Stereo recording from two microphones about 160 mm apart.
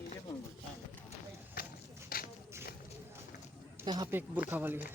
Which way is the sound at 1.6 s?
70° left (ahead or behind).